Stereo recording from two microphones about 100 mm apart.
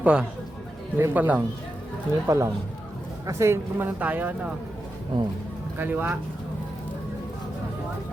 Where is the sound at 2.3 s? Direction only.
30° right (ahead or behind); by 4.5 s 15° right (ahead or behind).